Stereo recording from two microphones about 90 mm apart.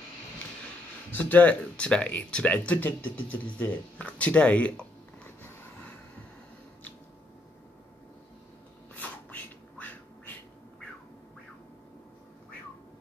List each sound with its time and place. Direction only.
1.1 s speech: 20° left (ahead or behind)
9.3 s duck: 20° left (ahead or behind)